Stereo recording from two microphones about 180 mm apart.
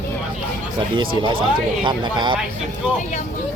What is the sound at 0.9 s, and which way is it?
Speech, 25° right (ahead or behind).